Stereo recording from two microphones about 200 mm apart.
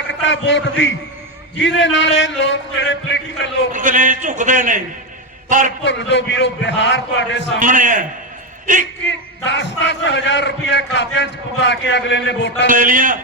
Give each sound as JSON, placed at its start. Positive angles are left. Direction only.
{"t": 0.1, "sound": "a man's voice", "side_deg": 65}
{"t": 3.7, "sound": "a man's voice", "side_deg": -40}
{"t": 5.8, "sound": "a man's voice", "side_deg": 65}
{"t": 7.6, "sound": "a man's voice", "side_deg": -40}
{"t": 9.0, "sound": "a man's voice", "side_deg": 65}
{"t": 12.6, "sound": "a man's voice", "side_deg": -40}